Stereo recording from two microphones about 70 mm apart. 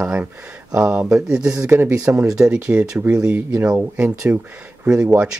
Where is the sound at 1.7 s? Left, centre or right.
Right.